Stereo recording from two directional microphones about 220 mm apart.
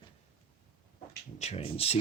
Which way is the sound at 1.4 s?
30° left (ahead or behind).